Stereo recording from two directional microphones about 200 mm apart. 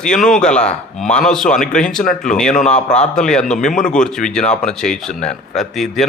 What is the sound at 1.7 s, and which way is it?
Speech, 5° left (ahead or behind).